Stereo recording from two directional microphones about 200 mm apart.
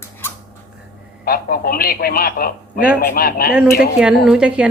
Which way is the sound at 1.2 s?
50° left (ahead or behind).